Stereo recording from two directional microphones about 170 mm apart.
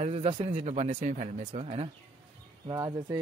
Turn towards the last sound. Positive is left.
turn(degrees=-20)  # may be behind; listen again after turning